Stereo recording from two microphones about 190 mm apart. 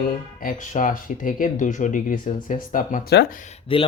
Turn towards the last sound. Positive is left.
turn(degrees=30)  # may be behind; listen again after turning